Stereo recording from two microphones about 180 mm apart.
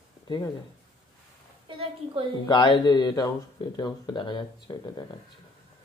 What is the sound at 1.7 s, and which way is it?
Speech, 30° right (ahead or behind).